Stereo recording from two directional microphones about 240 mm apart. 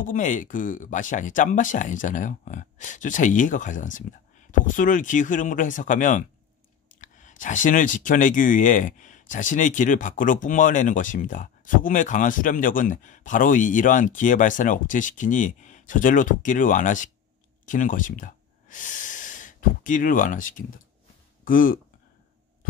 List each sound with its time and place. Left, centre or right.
0.0 s speech: left